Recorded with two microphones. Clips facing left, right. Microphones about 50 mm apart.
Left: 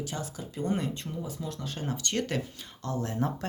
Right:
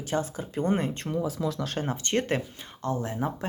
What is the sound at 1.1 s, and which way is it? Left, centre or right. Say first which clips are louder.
Speech: right 8 dB; right.